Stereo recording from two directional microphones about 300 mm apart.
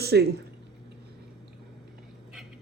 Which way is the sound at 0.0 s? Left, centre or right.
Right.